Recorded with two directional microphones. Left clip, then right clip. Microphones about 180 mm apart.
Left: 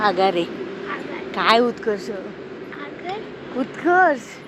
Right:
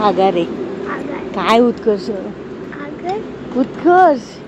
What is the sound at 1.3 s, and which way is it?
Speech, 5° right (ahead or behind).